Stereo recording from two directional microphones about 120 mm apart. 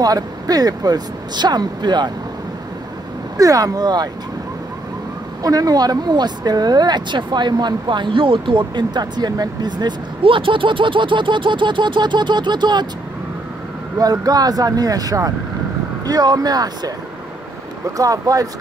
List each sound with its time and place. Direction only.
0.0 s speech: 30° right (ahead or behind)
3.3 s speech: 30° right (ahead or behind)
5.4 s speech: 30° right (ahead or behind)
13.9 s speech: 30° right (ahead or behind)
17.9 s speech: 30° right (ahead or behind)